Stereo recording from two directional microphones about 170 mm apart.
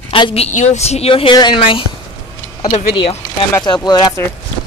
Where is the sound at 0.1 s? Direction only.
30° left (ahead or behind).